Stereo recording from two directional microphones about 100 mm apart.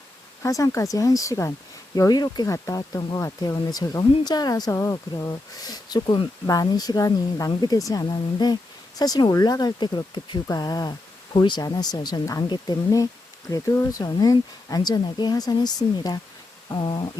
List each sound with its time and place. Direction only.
0.4 s speech: 35° left (ahead or behind)
4.7 s speech: 30° left (ahead or behind)
5.1 s speech: 40° left (ahead or behind)